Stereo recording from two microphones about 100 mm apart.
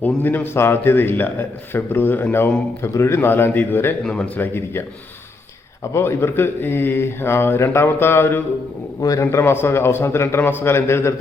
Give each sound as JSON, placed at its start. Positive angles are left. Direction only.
{"t": 0.0, "sound": "a man's voice", "side_deg": 20}
{"t": 4.0, "sound": "speech", "side_deg": 10}
{"t": 4.4, "sound": "a man's voice", "side_deg": 20}
{"t": 5.9, "sound": "a man's voice", "side_deg": 25}
{"t": 9.0, "sound": "a man's voice", "side_deg": 35}